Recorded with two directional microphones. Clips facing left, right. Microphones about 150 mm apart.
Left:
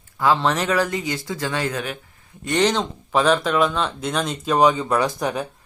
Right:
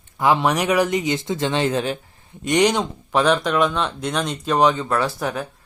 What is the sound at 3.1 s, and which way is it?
A man's voice, 5° left (ahead or behind).